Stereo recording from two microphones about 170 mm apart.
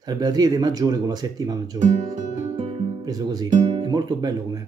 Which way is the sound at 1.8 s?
45° right (ahead or behind).